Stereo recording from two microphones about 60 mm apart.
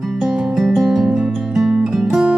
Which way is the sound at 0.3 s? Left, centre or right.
Centre.